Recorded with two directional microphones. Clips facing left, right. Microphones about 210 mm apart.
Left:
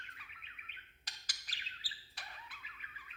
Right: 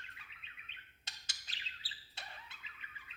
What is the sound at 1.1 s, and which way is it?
Bird, 25° right (ahead or behind).